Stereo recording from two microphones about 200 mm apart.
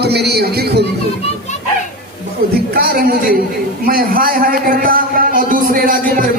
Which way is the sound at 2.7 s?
50° right (ahead or behind).